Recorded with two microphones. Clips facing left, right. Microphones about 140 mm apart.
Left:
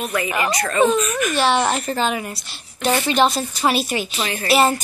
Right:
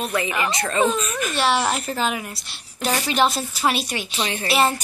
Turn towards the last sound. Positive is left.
turn(degrees=0)  # may be behind; listen again after turning